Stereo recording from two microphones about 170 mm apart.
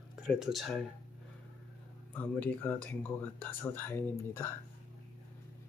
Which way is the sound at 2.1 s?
10° left (ahead or behind).